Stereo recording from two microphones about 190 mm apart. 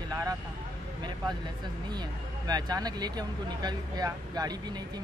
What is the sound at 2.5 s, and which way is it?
Speech, 20° right (ahead or behind).